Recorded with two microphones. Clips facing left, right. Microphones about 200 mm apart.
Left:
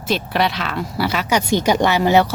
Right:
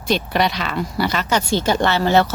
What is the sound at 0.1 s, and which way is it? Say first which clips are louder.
Speech: right 1 dB; centre (ahead or behind).